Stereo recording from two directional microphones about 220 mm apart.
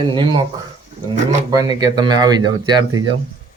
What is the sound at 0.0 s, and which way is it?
Speech, 20° right (ahead or behind).